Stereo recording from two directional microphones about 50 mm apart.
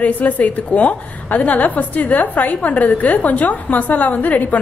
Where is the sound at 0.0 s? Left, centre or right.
Left.